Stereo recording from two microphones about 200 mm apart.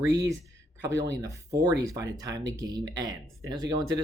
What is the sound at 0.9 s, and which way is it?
Speech, 15° right (ahead or behind).